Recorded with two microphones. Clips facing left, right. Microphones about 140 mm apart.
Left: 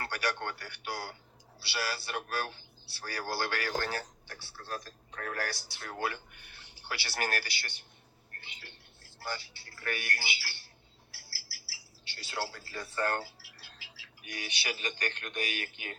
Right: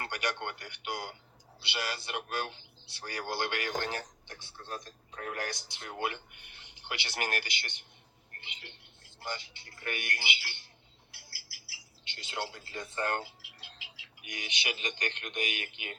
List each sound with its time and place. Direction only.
0.1 s speech: 20° right (ahead or behind)
11.1 s a sound: 20° right (ahead or behind)
14.3 s speech: 20° right (ahead or behind)